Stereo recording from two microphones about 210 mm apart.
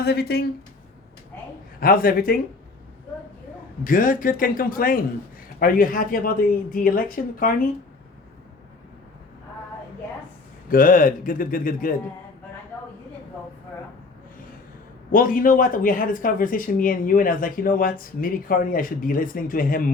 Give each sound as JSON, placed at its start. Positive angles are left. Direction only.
{"t": 0.0, "sound": "speech", "side_deg": 50}
{"t": 1.8, "sound": "speech", "side_deg": 45}
{"t": 3.8, "sound": "speech", "side_deg": 40}
{"t": 10.7, "sound": "speech", "side_deg": 40}
{"t": 15.1, "sound": "speech", "side_deg": 40}